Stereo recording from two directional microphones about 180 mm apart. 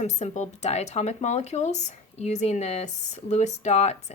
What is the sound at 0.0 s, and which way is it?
Speech, 40° left (ahead or behind).